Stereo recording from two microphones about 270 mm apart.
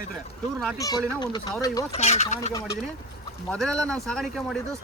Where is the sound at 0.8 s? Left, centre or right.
Centre.